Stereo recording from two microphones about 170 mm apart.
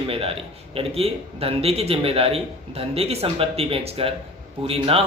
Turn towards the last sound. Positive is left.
turn(degrees=-35)  # may be behind; listen again after turning